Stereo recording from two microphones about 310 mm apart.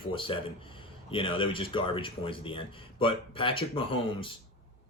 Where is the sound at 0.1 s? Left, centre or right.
Centre.